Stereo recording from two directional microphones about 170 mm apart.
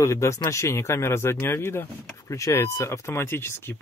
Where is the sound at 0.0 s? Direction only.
15° left (ahead or behind).